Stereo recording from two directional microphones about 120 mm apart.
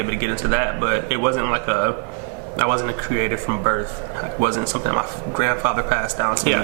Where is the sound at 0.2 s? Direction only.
15° right (ahead or behind).